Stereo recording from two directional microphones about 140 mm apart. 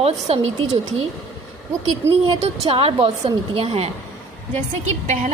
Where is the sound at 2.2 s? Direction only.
45° right (ahead or behind).